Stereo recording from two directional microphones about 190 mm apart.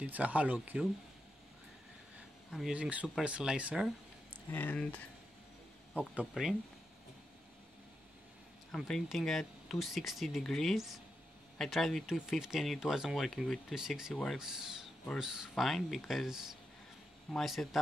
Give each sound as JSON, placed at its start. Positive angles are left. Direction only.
{"t": 0.0, "sound": "speech", "side_deg": -10}
{"t": 2.5, "sound": "speech", "side_deg": -5}
{"t": 4.5, "sound": "speech", "side_deg": 10}
{"t": 6.1, "sound": "speech", "side_deg": -5}
{"t": 8.7, "sound": "speech", "side_deg": 0}